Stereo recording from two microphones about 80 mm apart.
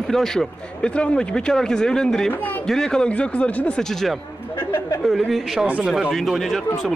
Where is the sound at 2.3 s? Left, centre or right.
Left.